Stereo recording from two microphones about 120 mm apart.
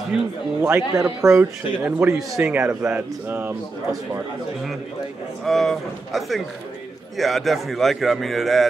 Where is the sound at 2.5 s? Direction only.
20° right (ahead or behind).